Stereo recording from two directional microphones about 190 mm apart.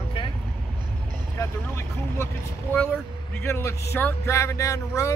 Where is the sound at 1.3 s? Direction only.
15° left (ahead or behind).